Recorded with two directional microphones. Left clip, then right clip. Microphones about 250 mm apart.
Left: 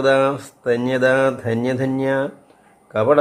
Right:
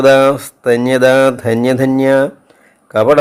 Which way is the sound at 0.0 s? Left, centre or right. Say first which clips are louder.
Right 8 dB; right.